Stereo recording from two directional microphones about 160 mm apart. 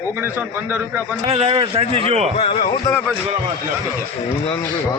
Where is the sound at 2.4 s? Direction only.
40° left (ahead or behind).